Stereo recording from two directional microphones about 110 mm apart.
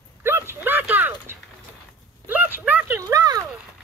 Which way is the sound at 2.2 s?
15° right (ahead or behind).